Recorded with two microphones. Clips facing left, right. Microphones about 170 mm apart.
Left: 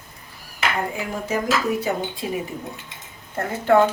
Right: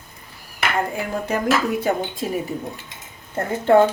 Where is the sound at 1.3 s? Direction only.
55° right (ahead or behind).